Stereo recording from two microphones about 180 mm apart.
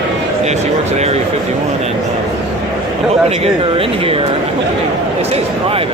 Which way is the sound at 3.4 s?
30° right (ahead or behind).